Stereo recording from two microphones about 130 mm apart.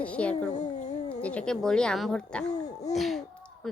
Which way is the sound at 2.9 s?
Centre (ahead or behind).